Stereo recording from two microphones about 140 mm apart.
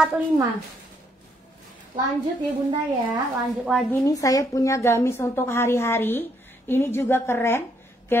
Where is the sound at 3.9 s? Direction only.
25° left (ahead or behind).